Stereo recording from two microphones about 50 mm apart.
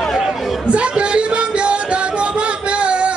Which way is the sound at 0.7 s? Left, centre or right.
Right.